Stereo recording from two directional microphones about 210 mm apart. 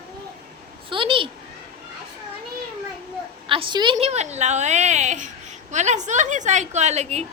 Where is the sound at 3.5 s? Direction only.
25° right (ahead or behind).